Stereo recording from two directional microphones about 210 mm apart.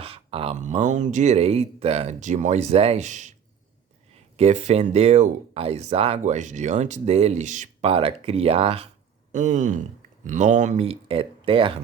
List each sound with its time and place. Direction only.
0.0 s speech: 25° right (ahead or behind)